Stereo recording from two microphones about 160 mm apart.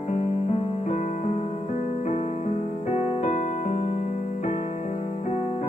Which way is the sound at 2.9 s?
45° left (ahead or behind).